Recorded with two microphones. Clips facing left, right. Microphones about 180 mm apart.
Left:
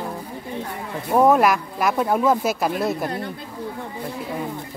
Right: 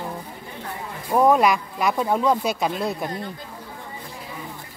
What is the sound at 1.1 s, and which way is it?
Speech, 5° left (ahead or behind).